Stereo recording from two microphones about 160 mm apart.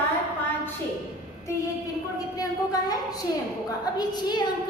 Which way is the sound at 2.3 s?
25° left (ahead or behind).